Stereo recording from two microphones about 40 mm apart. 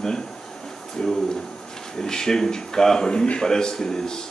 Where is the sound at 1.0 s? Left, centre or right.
Left.